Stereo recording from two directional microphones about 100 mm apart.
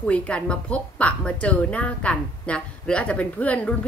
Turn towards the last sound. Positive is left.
turn(degrees=15)  # may be behind; listen again after turning